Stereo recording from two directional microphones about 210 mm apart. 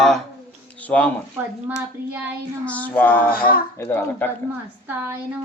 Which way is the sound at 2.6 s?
5° left (ahead or behind).